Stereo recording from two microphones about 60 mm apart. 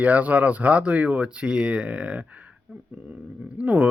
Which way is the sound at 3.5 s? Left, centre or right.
Right.